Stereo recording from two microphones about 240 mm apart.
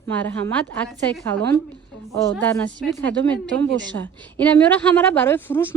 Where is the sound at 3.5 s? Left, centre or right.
Right.